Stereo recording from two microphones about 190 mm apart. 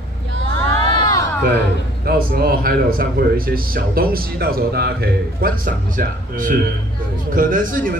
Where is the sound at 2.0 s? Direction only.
50° right (ahead or behind).